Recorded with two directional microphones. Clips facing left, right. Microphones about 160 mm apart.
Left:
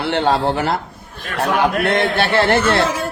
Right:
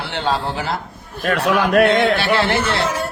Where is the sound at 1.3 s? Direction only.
70° right (ahead or behind).